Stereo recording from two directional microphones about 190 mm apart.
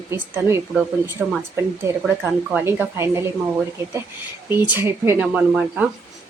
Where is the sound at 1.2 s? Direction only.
5° right (ahead or behind).